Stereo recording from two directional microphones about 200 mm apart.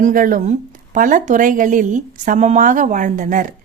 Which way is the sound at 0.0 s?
45° right (ahead or behind).